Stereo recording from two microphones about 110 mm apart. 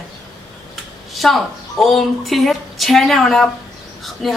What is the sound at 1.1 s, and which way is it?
A man's voice, centre (ahead or behind).